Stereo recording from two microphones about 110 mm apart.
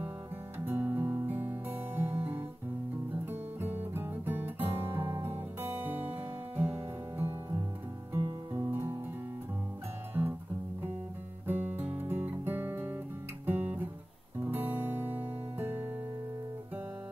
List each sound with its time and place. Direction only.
0.7 s music: 20° right (ahead or behind)
10.1 s music: 20° right (ahead or behind)
11.4 s music: 20° right (ahead or behind)
14.4 s guitar: 20° right (ahead or behind)